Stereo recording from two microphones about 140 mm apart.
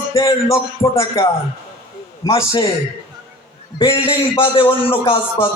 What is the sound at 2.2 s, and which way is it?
Music, 20° left (ahead or behind).